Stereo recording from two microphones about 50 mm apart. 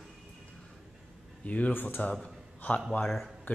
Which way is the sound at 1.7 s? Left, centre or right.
Left.